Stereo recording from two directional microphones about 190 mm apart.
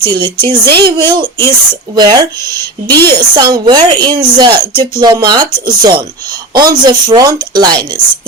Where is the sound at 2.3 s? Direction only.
15° left (ahead or behind).